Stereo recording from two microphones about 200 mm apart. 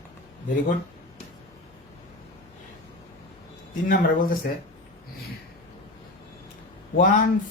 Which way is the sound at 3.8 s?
45° left (ahead or behind).